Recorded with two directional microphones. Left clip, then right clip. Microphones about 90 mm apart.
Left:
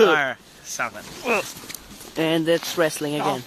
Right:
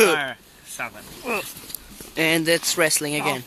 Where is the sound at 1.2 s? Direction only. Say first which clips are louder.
Left 4 dB; 5° left (ahead or behind).